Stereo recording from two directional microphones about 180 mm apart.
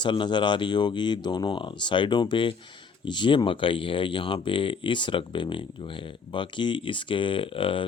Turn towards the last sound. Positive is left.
turn(degrees=30)  # may be behind; listen again after turning